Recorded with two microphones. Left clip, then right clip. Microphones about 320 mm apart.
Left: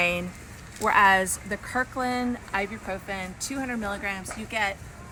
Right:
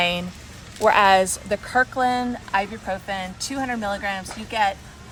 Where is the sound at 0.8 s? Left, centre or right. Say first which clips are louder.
Right 4 dB; right.